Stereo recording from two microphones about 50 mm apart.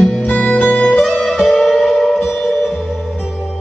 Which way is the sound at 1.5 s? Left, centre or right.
Centre.